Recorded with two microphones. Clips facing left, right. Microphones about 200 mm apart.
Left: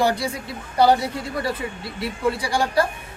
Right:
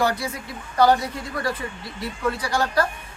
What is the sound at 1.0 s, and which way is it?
Speech, 10° left (ahead or behind).